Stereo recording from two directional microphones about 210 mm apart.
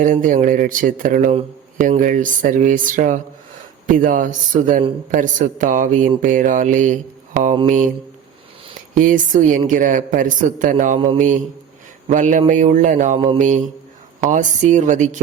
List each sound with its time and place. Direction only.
0.0 s a woman's voice: 35° right (ahead or behind)
9.0 s a woman's voice: 40° right (ahead or behind)
13.1 s mantra: 25° right (ahead or behind)
14.2 s a woman's voice: 35° right (ahead or behind)